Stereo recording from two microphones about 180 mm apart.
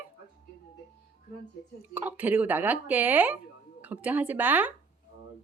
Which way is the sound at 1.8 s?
10° right (ahead or behind).